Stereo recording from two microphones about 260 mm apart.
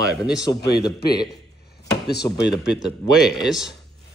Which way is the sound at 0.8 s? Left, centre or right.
Centre.